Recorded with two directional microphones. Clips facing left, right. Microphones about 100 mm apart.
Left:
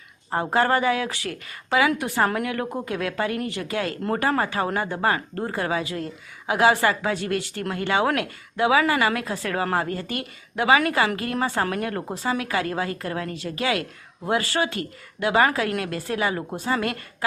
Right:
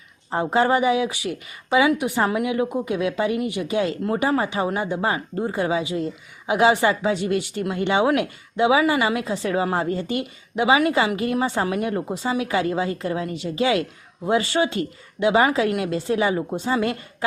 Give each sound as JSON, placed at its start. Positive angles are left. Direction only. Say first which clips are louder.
{"t": 0.5, "sound": "speech", "louder": "right 2 dB", "side_deg": -15}